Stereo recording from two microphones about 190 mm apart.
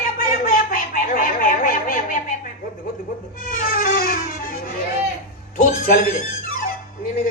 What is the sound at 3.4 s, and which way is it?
Music, 45° left (ahead or behind).